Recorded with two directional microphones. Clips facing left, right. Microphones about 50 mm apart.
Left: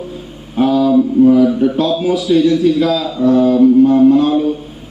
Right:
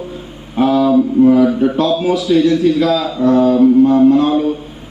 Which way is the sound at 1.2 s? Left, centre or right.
Right.